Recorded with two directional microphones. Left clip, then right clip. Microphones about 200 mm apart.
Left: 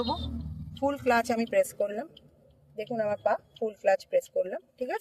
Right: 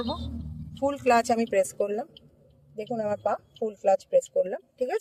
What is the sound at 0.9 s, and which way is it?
Speech, 40° right (ahead or behind).